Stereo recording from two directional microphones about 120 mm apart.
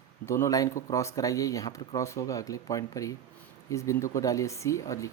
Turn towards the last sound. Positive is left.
turn(degrees=25)  # may be behind; listen again after turning